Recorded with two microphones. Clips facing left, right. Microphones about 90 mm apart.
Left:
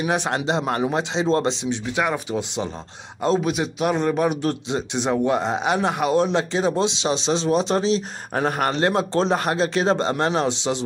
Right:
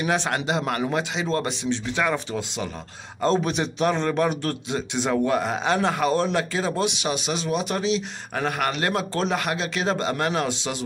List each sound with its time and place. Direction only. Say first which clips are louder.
0.0 s a man's voice: left 2 dB; 15° left (ahead or behind)
3.2 s a man's voice: left 1 dB; 5° left (ahead or behind); by 10.8 s 25° left (ahead or behind)